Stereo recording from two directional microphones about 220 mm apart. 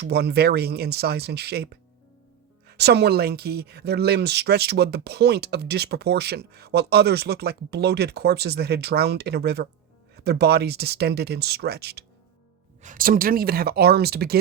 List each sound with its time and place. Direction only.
0.0 s speech: 50° right (ahead or behind)
12.8 s speech: 40° right (ahead or behind)